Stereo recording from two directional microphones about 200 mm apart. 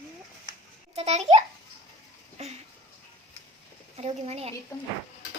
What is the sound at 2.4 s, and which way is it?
Speech, 30° right (ahead or behind).